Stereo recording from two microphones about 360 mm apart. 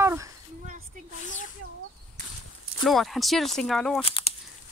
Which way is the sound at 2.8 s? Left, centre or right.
Centre.